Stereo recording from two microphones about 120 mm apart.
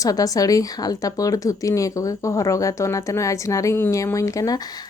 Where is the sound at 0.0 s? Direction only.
30° left (ahead or behind).